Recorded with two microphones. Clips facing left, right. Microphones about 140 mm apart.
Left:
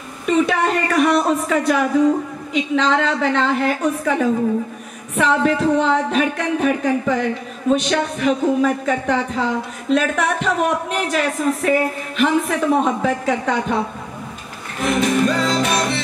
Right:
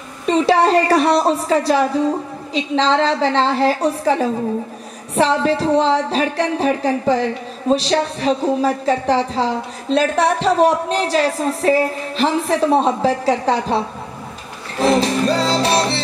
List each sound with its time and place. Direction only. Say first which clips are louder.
0.3 s speech: right 4 dB; 30° right (ahead or behind)
2.5 s a sound: right 1 dB; 30° right (ahead or behind)
14.8 s music: right 2 dB; 30° right (ahead or behind)